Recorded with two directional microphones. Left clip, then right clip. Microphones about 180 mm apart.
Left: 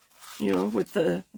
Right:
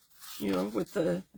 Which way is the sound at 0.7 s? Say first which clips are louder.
Left 5 dB; 50° left (ahead or behind).